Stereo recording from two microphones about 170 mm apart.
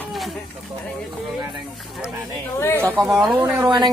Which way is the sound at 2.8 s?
10° right (ahead or behind).